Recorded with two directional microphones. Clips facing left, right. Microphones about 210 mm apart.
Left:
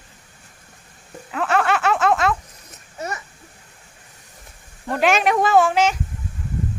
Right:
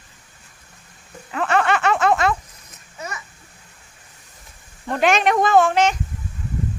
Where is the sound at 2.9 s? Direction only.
40° left (ahead or behind).